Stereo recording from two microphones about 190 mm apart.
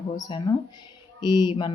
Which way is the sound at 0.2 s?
25° left (ahead or behind).